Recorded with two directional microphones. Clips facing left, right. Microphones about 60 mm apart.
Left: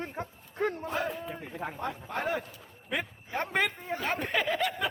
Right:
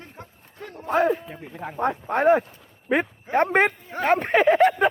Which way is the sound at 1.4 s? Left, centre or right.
Centre.